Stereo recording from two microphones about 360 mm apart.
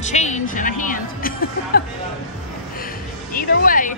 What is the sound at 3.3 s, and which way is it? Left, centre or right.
Speech, left.